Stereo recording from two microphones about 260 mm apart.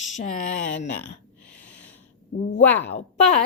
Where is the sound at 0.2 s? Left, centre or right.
Left.